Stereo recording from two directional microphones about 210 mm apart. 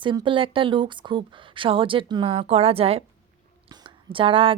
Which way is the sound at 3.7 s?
25° right (ahead or behind).